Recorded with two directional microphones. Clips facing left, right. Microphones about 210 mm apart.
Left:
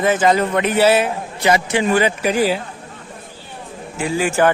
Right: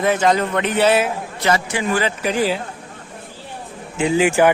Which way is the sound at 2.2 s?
5° left (ahead or behind).